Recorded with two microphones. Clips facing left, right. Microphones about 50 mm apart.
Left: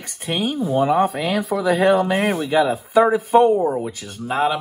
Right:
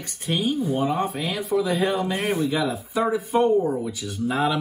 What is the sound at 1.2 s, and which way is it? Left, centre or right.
Speech, left.